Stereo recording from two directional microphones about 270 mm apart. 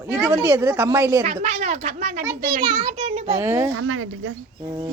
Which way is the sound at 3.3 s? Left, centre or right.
Centre.